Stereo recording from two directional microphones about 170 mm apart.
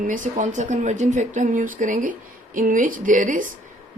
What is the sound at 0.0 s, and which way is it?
Speech, 50° right (ahead or behind).